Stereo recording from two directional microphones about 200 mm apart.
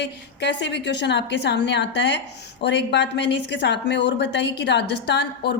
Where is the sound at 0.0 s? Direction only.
60° left (ahead or behind).